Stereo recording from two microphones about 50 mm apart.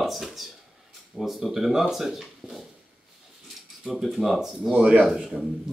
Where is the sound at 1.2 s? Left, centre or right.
Centre.